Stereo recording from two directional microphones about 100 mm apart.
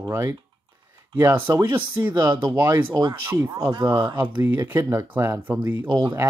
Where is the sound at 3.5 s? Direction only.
40° right (ahead or behind).